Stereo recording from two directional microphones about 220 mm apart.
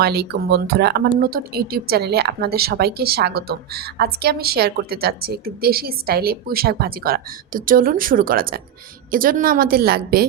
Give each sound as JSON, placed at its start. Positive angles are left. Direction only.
{"t": 0.0, "sound": "a woman's voice", "side_deg": -45}